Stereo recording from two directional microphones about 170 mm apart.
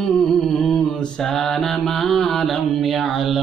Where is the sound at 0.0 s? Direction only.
5° left (ahead or behind).